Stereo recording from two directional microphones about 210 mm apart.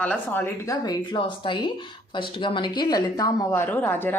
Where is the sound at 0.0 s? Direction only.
5° left (ahead or behind).